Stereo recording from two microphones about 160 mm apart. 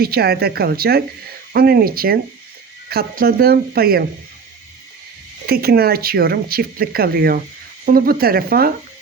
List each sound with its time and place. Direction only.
0.0 s speech: 75° right (ahead or behind)
5.5 s speech: 70° right (ahead or behind)